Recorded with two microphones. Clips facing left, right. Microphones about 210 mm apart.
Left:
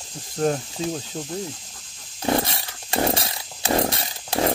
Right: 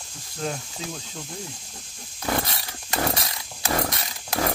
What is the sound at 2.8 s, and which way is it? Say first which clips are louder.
Chainsaw: left 4 dB; 25° left (ahead or behind).